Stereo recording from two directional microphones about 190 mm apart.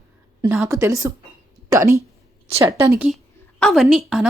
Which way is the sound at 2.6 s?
15° right (ahead or behind).